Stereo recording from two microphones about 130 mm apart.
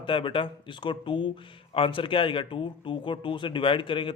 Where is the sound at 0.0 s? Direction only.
40° left (ahead or behind).